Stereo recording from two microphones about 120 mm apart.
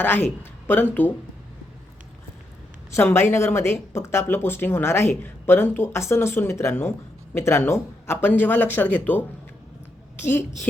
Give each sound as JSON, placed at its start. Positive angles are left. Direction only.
{"t": 0.0, "sound": "a man's voice", "side_deg": 15}
{"t": 2.9, "sound": "a man's voice", "side_deg": 20}